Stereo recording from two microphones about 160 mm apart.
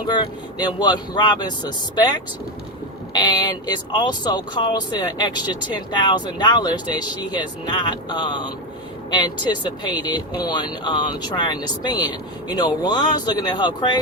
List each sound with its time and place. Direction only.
0.6 s speech: 25° left (ahead or behind)